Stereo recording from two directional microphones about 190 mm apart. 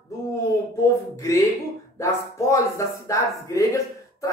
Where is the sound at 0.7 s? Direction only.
15° left (ahead or behind).